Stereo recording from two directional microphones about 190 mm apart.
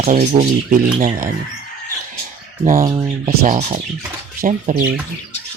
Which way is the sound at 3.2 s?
40° right (ahead or behind).